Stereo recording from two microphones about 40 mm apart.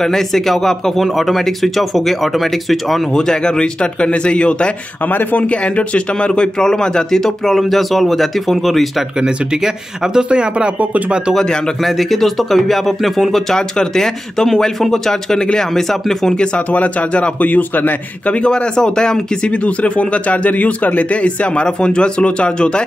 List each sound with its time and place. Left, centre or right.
0.0 s speech: centre
3.2 s speech: centre
9.2 s speech: right
11.3 s speech: centre
16.7 s speech: left
18.2 s speech: left
18.5 s speech: centre
19.5 s speech: left
21.2 s speech: left